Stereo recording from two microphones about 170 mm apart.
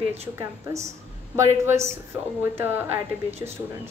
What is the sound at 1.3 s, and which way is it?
A woman's voice, 15° right (ahead or behind).